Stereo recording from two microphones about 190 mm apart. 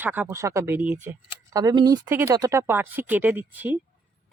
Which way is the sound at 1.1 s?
10° right (ahead or behind).